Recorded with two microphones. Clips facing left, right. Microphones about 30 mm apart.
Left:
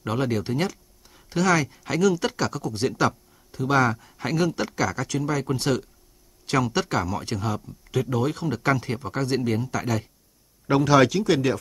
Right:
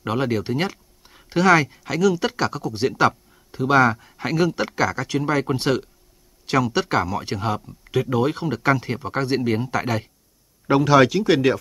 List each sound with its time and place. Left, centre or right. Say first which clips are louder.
0.0 s speech: right 3 dB; centre
0.7 s a sound: right 2 dB; right
1.8 s speech: right 2 dB; centre; by 5.9 s right
6.4 s speech: right 3 dB; centre
10.7 s speech: right 3 dB; centre
11.2 s speech: right 4 dB; right